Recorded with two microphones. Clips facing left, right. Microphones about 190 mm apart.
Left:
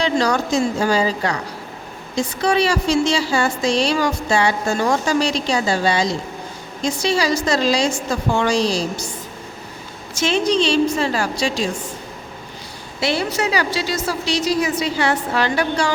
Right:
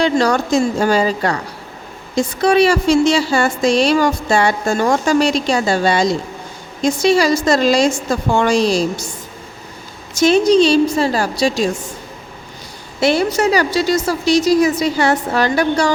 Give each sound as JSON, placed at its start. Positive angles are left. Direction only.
{"t": 0.0, "sound": "a woman's voice", "side_deg": -50}
{"t": 10.2, "sound": "a woman's voice", "side_deg": -40}
{"t": 13.0, "sound": "a woman's voice", "side_deg": -45}